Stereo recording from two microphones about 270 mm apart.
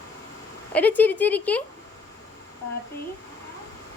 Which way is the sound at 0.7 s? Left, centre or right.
Centre.